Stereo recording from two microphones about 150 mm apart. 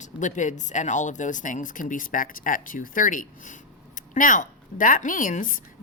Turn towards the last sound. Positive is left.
turn(degrees=60)  # may be behind; listen again after turning